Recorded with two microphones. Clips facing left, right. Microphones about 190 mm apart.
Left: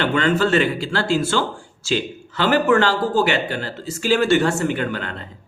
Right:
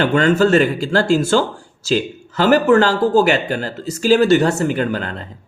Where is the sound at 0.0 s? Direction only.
45° right (ahead or behind).